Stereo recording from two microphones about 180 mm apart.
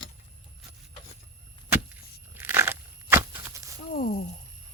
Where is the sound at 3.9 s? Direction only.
55° left (ahead or behind).